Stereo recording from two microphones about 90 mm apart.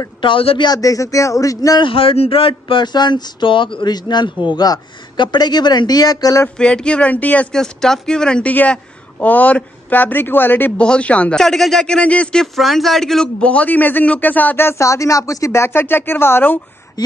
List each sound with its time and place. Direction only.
0.2 s a man's voice: 80° left
0.7 s speech: 40° left (ahead or behind)
1.8 s a man's voice: 80° left
2.8 s speech: 55° left (ahead or behind)
6.6 s speech: 10° left (ahead or behind)
7.5 s speech: 5° left (ahead or behind); by 16.5 s 25° left (ahead or behind)